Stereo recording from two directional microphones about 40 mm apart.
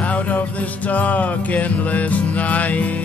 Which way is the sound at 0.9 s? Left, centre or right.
Left.